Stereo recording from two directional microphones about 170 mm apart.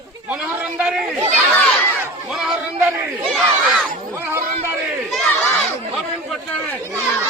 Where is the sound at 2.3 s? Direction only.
5° right (ahead or behind).